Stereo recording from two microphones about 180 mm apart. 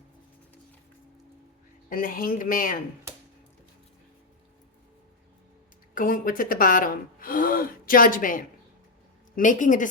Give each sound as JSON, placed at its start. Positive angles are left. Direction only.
{"t": 1.9, "sound": "speech", "side_deg": 50}
{"t": 5.9, "sound": "speech", "side_deg": 50}